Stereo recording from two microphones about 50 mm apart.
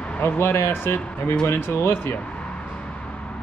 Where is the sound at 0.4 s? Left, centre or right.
Left.